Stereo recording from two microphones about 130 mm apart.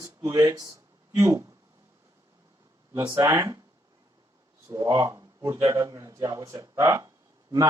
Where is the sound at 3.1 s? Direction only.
25° right (ahead or behind).